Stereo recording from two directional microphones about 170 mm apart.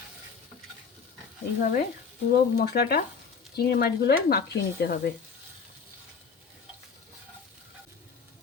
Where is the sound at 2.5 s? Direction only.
70° left (ahead or behind).